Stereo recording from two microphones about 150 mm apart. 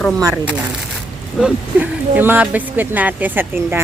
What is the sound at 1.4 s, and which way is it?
Speech, 5° right (ahead or behind).